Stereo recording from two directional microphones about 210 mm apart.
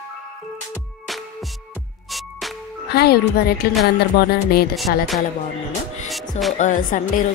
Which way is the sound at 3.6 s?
45° left (ahead or behind).